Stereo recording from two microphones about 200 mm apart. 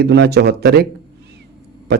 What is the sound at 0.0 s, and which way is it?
Speech, 55° right (ahead or behind).